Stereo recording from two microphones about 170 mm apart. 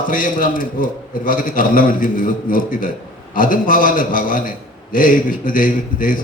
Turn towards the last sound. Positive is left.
turn(degrees=55)  # may be behind; listen again after turning